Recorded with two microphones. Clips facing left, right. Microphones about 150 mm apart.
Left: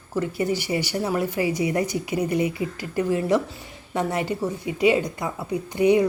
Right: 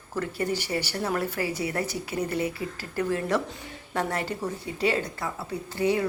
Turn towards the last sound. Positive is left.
turn(degrees=15)  # may be behind; listen again after turning